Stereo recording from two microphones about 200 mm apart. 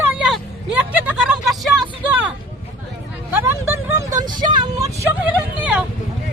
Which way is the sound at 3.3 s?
10° right (ahead or behind).